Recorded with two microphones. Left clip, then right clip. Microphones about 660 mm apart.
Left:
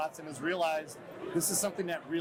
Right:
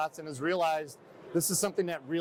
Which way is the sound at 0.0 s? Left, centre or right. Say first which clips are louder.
Right 2 dB; right.